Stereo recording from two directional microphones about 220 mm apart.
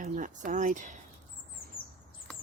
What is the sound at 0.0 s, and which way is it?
Speech, 35° right (ahead or behind).